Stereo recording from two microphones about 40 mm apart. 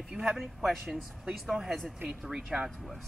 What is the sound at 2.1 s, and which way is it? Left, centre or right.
Speech, centre.